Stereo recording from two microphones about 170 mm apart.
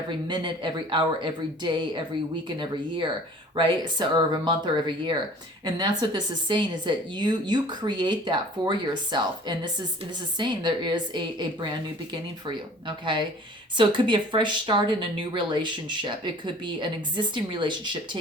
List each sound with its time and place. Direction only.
0.3 s speech: 30° right (ahead or behind)
13.7 s speech: 30° right (ahead or behind)